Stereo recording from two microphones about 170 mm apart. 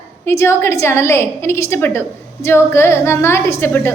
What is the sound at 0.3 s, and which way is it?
A woman's voice, 15° left (ahead or behind).